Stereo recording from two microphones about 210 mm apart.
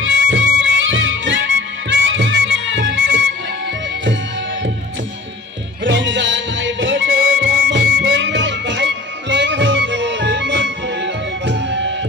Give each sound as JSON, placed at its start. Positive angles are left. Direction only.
{"t": 0.0, "sound": "music", "side_deg": -60}
{"t": 5.9, "sound": "music", "side_deg": -60}